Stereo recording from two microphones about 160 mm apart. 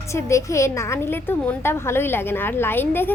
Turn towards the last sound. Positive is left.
turn(degrees=10)  # may be behind; listen again after turning